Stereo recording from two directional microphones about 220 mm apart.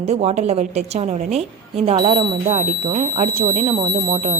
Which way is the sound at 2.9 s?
20° right (ahead or behind).